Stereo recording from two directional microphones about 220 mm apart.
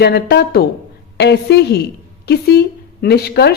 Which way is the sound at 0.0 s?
50° left (ahead or behind).